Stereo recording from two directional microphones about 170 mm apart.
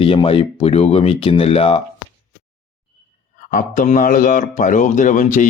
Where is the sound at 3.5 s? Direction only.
50° left (ahead or behind).